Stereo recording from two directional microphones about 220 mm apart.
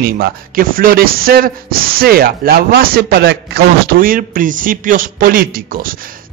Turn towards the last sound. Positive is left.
turn(degrees=-40)  # may be behind; listen again after turning